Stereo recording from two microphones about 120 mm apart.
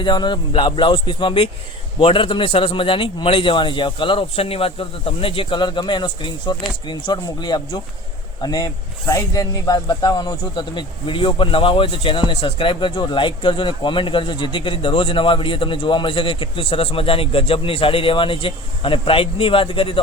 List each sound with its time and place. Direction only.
0.0 s speech: 40° left (ahead or behind)